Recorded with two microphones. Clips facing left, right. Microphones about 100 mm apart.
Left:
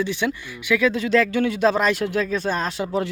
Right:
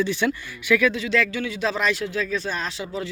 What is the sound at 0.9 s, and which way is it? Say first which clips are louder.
A man's voice: left 4 dB; 40° left (ahead or behind).